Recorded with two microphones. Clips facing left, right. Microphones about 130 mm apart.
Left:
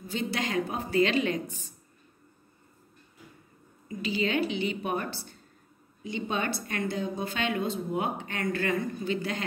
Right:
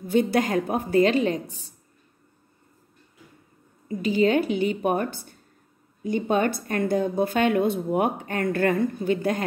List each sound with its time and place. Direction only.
0.0 s a woman's voice: 55° right (ahead or behind); by 1.7 s 35° right (ahead or behind)
3.9 s a woman's voice: 45° right (ahead or behind)